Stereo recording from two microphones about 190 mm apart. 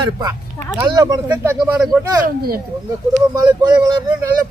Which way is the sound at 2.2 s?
50° right (ahead or behind).